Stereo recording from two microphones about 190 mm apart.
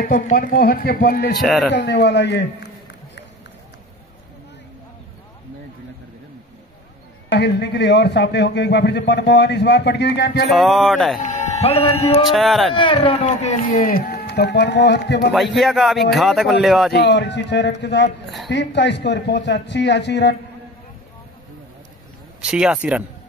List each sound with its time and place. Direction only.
0.0 s speech: 45° left (ahead or behind)
1.4 s a man's voice: centre (ahead or behind)
1.7 s a man's voice: 60° left (ahead or behind)
7.2 s a man's voice: 65° left (ahead or behind)
10.5 s a man's voice: centre (ahead or behind)
11.1 s speech: 40° left (ahead or behind)
12.3 s a man's voice: centre (ahead or behind)
12.7 s speech: 25° left (ahead or behind); by 15.3 s 65° left (ahead or behind)
15.3 s a man's voice: centre (ahead or behind)
16.9 s a man's voice: 65° left (ahead or behind)
22.4 s a man's voice: 5° right (ahead or behind)